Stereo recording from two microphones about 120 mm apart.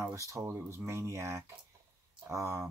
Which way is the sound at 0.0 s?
25° right (ahead or behind).